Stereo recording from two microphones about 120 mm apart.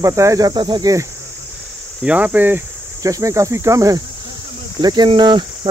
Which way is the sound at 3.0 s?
25° right (ahead or behind).